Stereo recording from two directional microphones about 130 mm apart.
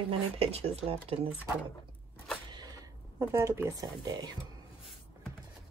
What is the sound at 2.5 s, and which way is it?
Speech, 30° right (ahead or behind).